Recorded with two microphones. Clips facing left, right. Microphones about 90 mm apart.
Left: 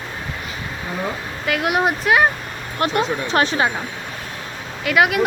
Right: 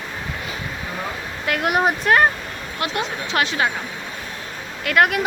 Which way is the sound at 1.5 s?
Centre (ahead or behind).